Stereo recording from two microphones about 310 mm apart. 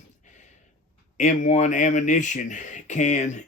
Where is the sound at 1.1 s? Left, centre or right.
Left.